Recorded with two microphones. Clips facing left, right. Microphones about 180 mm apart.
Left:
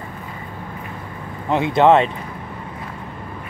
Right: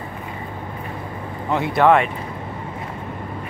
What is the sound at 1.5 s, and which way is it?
Speech, 20° left (ahead or behind).